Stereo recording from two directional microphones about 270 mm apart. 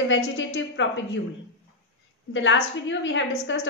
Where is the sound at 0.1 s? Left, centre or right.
Left.